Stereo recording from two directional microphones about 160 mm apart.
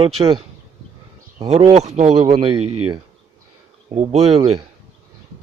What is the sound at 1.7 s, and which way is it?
Speech, 45° right (ahead or behind).